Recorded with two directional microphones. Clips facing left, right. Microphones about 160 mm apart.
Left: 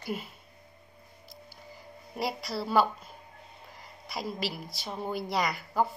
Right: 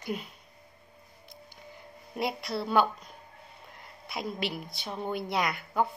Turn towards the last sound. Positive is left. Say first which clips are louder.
# even
turn(degrees=0)  # may be behind; listen again after turning